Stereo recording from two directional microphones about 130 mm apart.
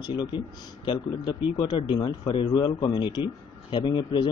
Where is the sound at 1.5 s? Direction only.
35° left (ahead or behind).